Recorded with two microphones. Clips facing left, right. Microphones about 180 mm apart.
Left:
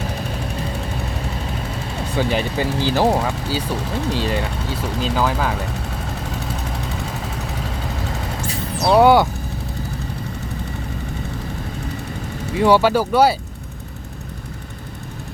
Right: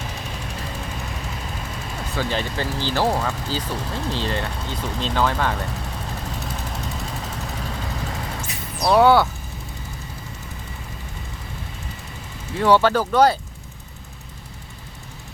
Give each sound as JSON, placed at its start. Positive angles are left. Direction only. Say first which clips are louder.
{"t": 2.1, "sound": "speech", "louder": "left 5 dB", "side_deg": 15}
{"t": 8.4, "sound": "a sound", "louder": "left 3 dB", "side_deg": 25}
{"t": 9.0, "sound": "speech", "louder": "left 2 dB", "side_deg": 15}
{"t": 12.5, "sound": "speech", "louder": "left 2 dB", "side_deg": 10}